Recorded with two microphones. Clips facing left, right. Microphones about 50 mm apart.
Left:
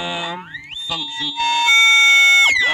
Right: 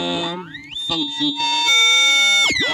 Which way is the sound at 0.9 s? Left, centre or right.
Left.